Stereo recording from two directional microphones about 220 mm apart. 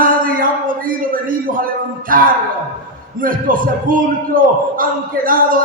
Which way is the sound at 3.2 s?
40° right (ahead or behind).